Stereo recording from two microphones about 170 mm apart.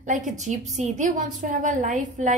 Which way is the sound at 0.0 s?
45° right (ahead or behind).